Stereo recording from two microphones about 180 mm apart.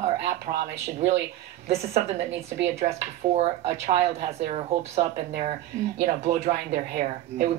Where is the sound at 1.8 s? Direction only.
35° right (ahead or behind).